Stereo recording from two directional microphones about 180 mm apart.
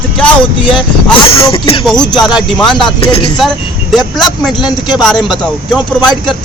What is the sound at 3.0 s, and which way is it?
Speech, 30° left (ahead or behind).